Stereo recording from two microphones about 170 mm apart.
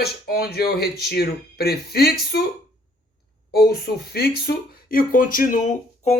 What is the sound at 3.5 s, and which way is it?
Speech, 70° left (ahead or behind).